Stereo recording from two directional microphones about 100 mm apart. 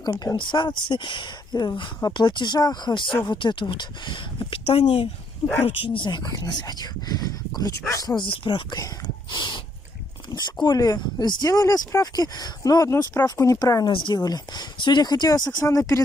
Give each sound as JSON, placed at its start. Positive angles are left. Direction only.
{"t": 0.0, "sound": "speech", "side_deg": 40}
{"t": 8.2, "sound": "speech", "side_deg": 55}
{"t": 13.9, "sound": "speech", "side_deg": 55}
{"t": 14.2, "sound": "speech", "side_deg": 45}
{"t": 15.6, "sound": "speech", "side_deg": 30}